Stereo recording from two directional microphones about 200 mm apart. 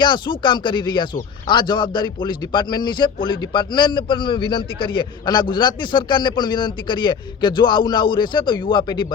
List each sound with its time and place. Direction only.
0.0 s a man's voice: 25° left (ahead or behind)